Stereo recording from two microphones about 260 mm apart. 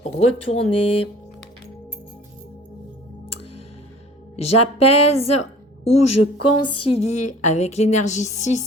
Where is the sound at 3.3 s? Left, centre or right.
Left.